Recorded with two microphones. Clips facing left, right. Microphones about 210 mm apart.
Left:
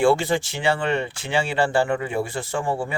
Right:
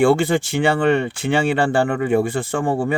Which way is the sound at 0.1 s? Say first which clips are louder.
Right 4 dB; 55° right (ahead or behind).